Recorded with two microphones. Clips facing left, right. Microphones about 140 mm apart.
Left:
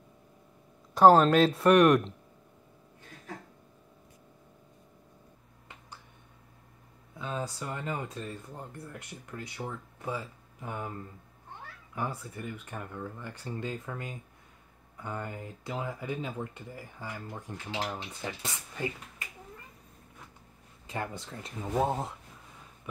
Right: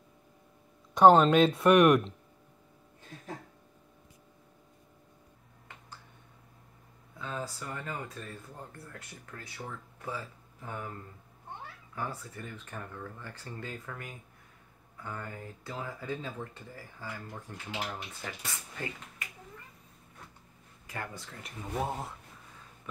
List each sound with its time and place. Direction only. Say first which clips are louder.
0.9 s speech: even; 5° left (ahead or behind)
7.2 s speech: left 3 dB; 20° left (ahead or behind)
11.9 s speech: left 3 dB; 15° left (ahead or behind)
20.8 s speech: left 4 dB; 25° left (ahead or behind)